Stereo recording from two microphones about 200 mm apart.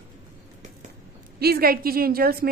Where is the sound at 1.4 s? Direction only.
50° right (ahead or behind).